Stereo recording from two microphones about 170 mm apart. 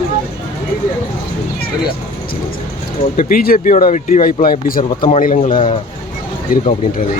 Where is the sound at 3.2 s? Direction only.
55° left (ahead or behind).